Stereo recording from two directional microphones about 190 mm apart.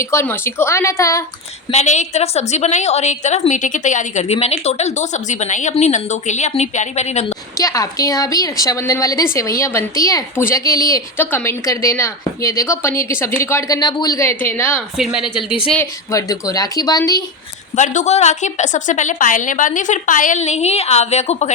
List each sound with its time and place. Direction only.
0.0 s a woman's voice: 15° left (ahead or behind)
1.7 s a woman's voice: 35° left (ahead or behind)
7.5 s a woman's voice: 15° left (ahead or behind)
14.9 s speech: 5° right (ahead or behind)
15.8 s a woman's voice: 15° left (ahead or behind)
17.7 s a woman's voice: 40° left (ahead or behind)